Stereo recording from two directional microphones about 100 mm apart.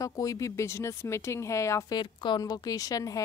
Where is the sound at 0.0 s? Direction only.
35° left (ahead or behind).